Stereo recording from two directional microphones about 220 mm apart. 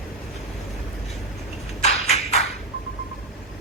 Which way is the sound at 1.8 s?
30° left (ahead or behind).